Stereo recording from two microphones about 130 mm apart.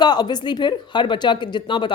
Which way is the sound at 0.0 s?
35° left (ahead or behind).